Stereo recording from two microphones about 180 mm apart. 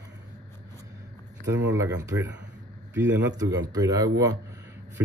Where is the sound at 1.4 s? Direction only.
90° right.